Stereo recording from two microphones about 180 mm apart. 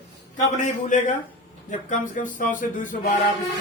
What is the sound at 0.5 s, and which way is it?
Speech, 45° left (ahead or behind).